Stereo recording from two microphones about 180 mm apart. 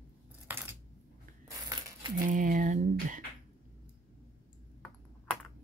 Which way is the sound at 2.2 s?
50° right (ahead or behind).